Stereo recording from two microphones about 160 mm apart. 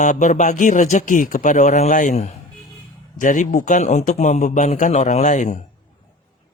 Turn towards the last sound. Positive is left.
turn(degrees=50)  # may be behind; listen again after turning